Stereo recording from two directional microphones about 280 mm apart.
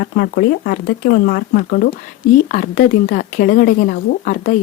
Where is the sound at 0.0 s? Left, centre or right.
Left.